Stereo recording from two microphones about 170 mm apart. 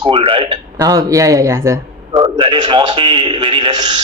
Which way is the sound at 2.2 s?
30° right (ahead or behind).